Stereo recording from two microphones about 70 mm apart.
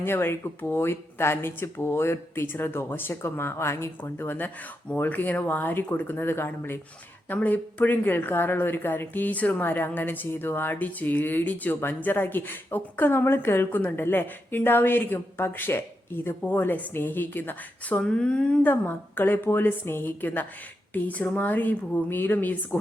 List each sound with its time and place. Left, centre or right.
0.0 s speech: left
4.3 s speech: left
18.0 s speech: centre
18.6 s speech: left